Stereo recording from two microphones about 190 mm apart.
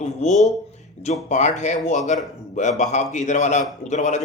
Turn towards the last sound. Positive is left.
turn(degrees=40)  # may be behind; listen again after turning